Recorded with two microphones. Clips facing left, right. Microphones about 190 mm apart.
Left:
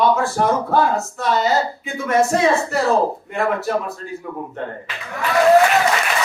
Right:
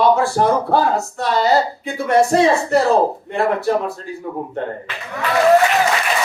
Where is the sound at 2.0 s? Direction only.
35° right (ahead or behind).